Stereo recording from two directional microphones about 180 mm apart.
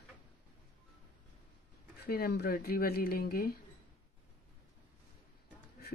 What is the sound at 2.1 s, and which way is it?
Speech, 60° left (ahead or behind).